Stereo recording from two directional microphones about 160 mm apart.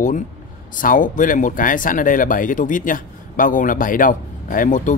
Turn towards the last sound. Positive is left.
turn(degrees=55)  # may be behind; listen again after turning